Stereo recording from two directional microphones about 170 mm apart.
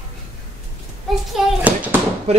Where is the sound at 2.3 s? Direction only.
40° right (ahead or behind).